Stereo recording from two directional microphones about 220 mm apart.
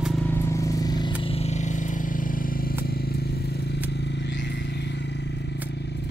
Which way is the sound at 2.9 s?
45° left (ahead or behind).